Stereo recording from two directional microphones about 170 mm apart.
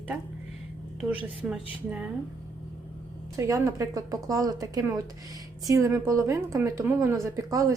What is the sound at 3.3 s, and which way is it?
A woman's voice, 20° right (ahead or behind).